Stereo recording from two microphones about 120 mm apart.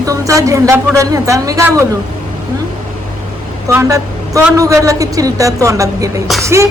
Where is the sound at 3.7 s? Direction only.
25° right (ahead or behind).